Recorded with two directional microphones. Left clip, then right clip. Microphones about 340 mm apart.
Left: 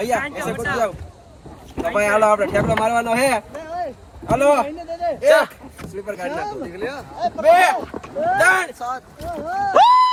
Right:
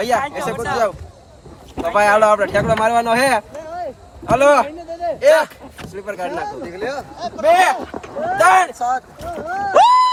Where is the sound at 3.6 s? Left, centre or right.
Left.